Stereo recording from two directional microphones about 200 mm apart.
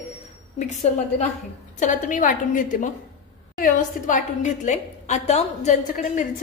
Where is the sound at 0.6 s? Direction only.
35° left (ahead or behind).